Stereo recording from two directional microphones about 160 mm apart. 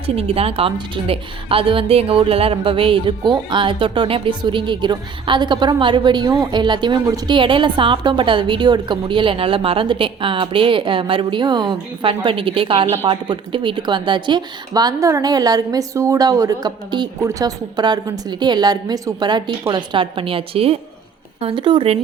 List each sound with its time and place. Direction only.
0.0 s a woman's voice: 40° right (ahead or behind)